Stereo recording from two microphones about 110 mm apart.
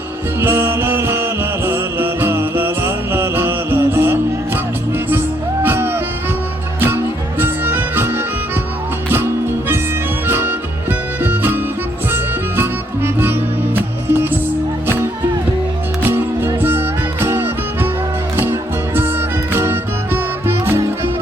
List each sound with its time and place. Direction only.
0.3 s music: 20° right (ahead or behind)
5.6 s music: 20° right (ahead or behind)
16.0 s music: 20° right (ahead or behind)
19.5 s music: 20° right (ahead or behind)